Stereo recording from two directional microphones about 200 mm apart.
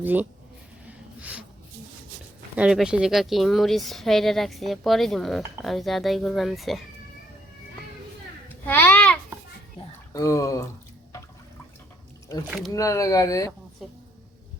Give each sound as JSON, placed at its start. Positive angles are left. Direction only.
{"t": 0.0, "sound": "speech", "side_deg": -10}
{"t": 0.9, "sound": "snort", "side_deg": -5}
{"t": 2.6, "sound": "speech", "side_deg": -5}
{"t": 8.4, "sound": "a sound", "side_deg": 10}
{"t": 10.1, "sound": "speech", "side_deg": 15}
{"t": 12.5, "sound": "speech", "side_deg": -5}
{"t": 12.7, "sound": "speech", "side_deg": 15}